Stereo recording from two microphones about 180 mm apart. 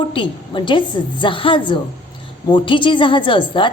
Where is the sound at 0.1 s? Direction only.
25° left (ahead or behind).